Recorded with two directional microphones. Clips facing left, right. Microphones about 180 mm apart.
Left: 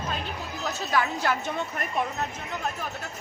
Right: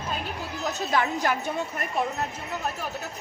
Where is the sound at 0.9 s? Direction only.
20° right (ahead or behind).